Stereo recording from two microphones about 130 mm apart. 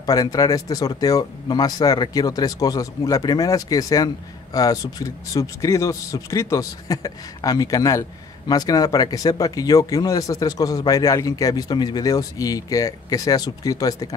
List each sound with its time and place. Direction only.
0.0 s speech: 30° left (ahead or behind)